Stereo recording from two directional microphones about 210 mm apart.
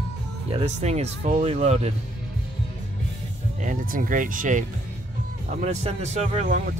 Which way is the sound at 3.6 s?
40° right (ahead or behind).